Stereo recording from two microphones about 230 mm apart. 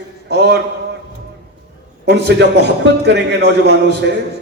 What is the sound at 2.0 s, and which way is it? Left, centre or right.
A man's voice, right.